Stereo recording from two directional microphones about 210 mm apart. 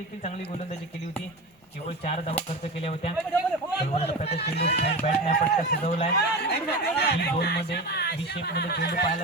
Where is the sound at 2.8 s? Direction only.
30° left (ahead or behind).